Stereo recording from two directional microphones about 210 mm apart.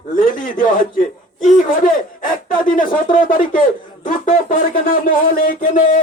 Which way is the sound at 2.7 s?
40° left (ahead or behind).